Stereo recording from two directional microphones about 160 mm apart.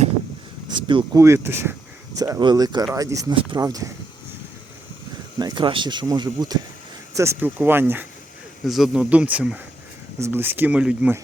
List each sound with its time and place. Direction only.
0.7 s speech: 30° right (ahead or behind)
1.2 s speech: 15° right (ahead or behind)
5.4 s speech: 25° right (ahead or behind)
8.6 s speech: centre (ahead or behind)